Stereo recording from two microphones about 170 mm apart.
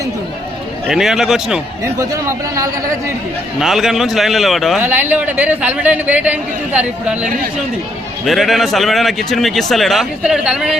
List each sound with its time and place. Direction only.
0.9 s a man's voice: centre (ahead or behind)
1.8 s speech: 20° right (ahead or behind)
3.6 s a man's voice: centre (ahead or behind)
4.8 s a man's voice: 10° right (ahead or behind)